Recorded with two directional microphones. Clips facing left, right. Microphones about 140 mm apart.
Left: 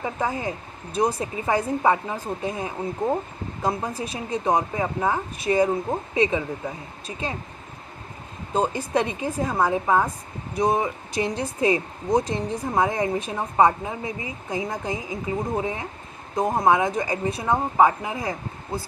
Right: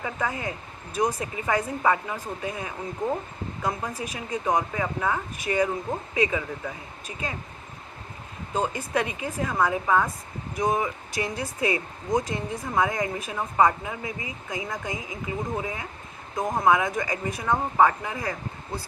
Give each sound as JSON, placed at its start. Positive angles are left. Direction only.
{"t": 0.0, "sound": "speech", "side_deg": 30}
{"t": 8.5, "sound": "speech", "side_deg": 35}